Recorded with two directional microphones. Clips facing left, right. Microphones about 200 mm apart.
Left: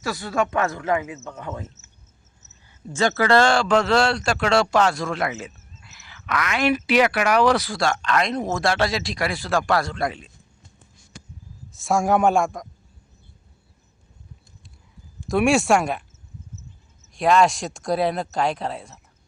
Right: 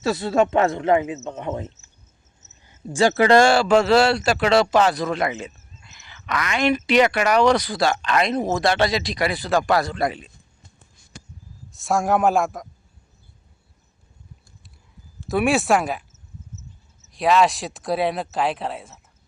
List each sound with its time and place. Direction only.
0.0 s speech: 25° right (ahead or behind)
2.9 s speech: 15° right (ahead or behind)
11.7 s speech: centre (ahead or behind)
15.3 s speech: centre (ahead or behind)
17.2 s speech: centre (ahead or behind)